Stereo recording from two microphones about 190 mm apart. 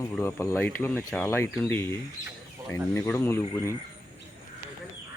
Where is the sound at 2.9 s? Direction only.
10° left (ahead or behind).